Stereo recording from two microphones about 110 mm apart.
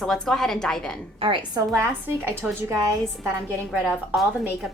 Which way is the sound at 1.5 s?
25° right (ahead or behind).